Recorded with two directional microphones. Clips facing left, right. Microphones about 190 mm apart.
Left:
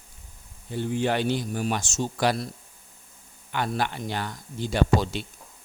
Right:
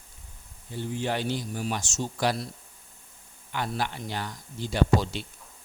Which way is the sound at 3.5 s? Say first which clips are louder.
Left 3 dB; 60° left (ahead or behind).